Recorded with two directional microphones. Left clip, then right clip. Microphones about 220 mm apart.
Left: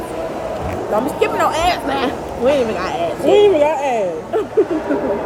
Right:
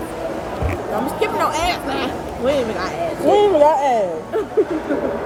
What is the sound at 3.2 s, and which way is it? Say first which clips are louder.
Speech: left 1 dB; 10° right (ahead or behind).